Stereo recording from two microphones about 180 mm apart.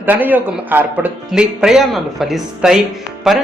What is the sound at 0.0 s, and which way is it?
Speech, 10° right (ahead or behind).